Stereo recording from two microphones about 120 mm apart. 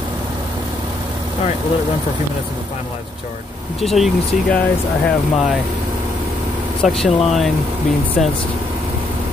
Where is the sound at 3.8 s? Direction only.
Centre (ahead or behind).